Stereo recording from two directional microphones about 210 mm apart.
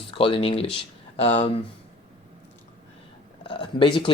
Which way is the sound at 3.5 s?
25° left (ahead or behind).